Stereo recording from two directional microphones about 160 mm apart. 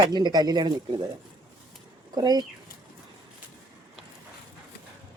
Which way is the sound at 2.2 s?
25° right (ahead or behind).